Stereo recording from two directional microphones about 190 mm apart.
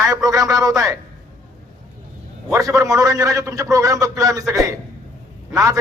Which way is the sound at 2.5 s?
15° right (ahead or behind).